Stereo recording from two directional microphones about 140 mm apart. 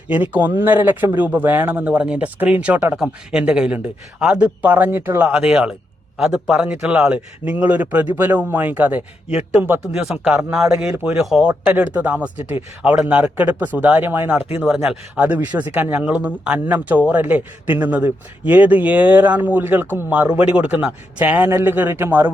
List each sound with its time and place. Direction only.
0.1 s speech: 10° right (ahead or behind)